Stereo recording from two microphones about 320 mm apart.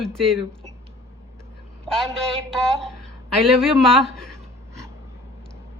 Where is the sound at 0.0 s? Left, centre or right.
Centre.